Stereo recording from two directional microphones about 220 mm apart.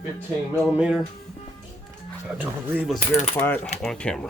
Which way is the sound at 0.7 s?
5° right (ahead or behind).